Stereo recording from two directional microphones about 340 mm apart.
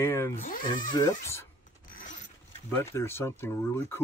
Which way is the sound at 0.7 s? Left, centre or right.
Centre.